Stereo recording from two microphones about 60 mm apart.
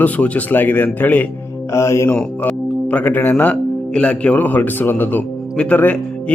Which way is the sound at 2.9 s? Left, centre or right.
Left.